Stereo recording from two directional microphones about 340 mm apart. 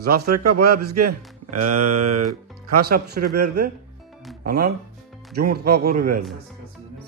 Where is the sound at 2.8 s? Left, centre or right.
Right.